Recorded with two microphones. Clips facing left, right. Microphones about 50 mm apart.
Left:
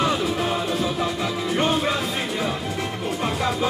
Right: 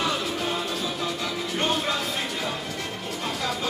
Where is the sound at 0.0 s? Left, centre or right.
Left.